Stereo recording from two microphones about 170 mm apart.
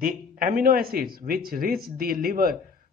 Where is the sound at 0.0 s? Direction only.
55° right (ahead or behind).